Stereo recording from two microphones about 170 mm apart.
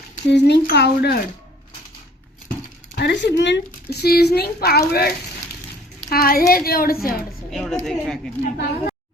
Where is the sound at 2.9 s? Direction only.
85° left; by 5.1 s 65° left (ahead or behind).